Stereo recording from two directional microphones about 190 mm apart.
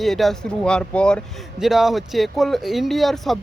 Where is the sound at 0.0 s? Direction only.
Centre (ahead or behind).